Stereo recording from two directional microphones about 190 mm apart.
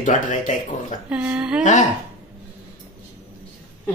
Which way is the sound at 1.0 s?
5° right (ahead or behind).